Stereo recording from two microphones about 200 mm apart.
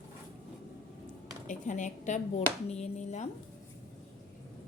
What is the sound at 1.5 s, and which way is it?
Speech, 40° left (ahead or behind).